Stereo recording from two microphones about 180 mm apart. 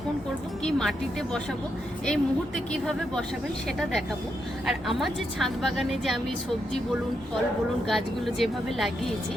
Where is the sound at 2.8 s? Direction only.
5° left (ahead or behind).